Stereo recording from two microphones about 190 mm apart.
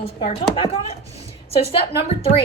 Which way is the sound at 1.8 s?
60° left (ahead or behind).